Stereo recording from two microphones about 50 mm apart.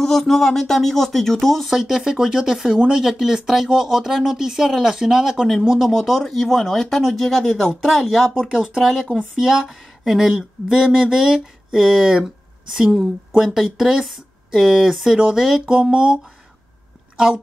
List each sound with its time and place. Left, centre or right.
0.0 s speech: centre
5.9 s speech: centre
8.4 s speech: centre
13.4 s speech: centre
15.7 s speech: centre